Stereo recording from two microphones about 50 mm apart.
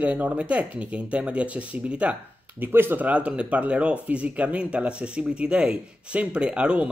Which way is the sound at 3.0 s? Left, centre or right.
Right.